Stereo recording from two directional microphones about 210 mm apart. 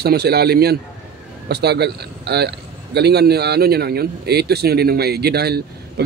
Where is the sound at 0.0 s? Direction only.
50° right (ahead or behind).